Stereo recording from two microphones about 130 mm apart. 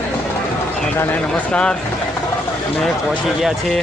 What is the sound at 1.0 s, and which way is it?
Speech, 10° left (ahead or behind).